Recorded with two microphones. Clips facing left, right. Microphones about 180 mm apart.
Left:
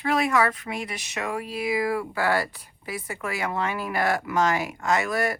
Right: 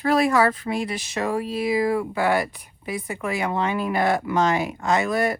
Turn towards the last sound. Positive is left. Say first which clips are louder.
# right 3 dB
turn(degrees=-25)  # may be behind; listen again after turning